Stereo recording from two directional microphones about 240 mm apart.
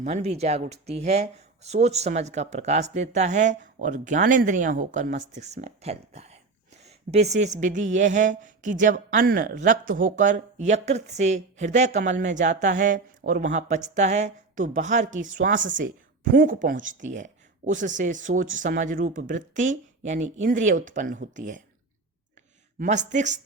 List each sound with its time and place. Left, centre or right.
0.0 s speech: right
22.8 s speech: right